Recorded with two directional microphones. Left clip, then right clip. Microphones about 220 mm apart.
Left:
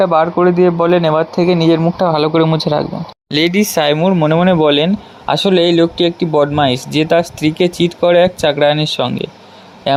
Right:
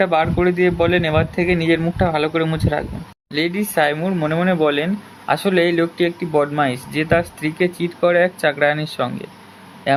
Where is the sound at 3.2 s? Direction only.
35° left (ahead or behind).